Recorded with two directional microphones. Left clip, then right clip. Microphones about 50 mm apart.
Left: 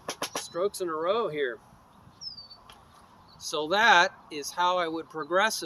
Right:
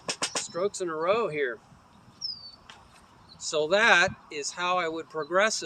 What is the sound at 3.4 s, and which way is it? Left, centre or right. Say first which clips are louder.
Speech: right 2 dB; left.